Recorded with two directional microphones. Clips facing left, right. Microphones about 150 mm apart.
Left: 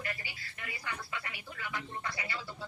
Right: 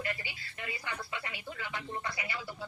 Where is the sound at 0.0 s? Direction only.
20° right (ahead or behind).